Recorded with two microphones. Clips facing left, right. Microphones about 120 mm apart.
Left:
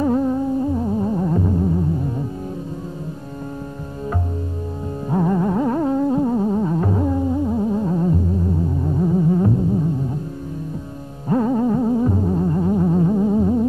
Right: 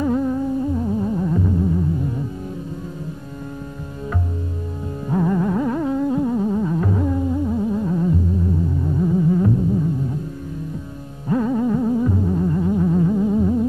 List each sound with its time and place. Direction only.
0.0 s music: 35° left (ahead or behind)
5.1 s music: 30° left (ahead or behind)
11.2 s music: 40° left (ahead or behind)